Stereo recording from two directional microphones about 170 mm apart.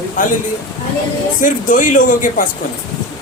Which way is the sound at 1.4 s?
50° left (ahead or behind).